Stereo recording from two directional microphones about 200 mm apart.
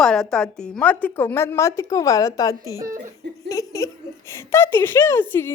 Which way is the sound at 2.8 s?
40° right (ahead or behind).